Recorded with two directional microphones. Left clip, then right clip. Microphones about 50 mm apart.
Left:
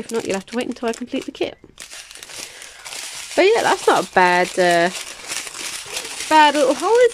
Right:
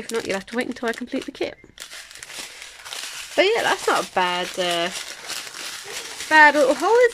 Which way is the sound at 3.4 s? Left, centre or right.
Left.